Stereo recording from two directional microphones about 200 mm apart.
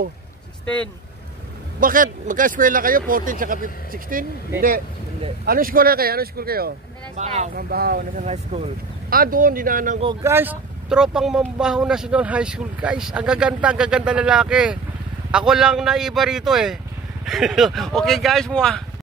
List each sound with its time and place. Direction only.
1.8 s speech: 45° right (ahead or behind)
7.2 s speech: 35° right (ahead or behind)
10.2 s speech: 10° right (ahead or behind)